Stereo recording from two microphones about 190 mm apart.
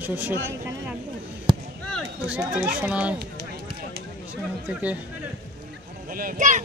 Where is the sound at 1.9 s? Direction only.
5° right (ahead or behind).